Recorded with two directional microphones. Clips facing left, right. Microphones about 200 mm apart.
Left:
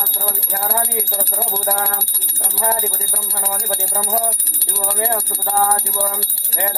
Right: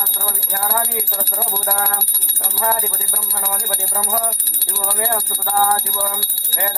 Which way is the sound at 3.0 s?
25° left (ahead or behind).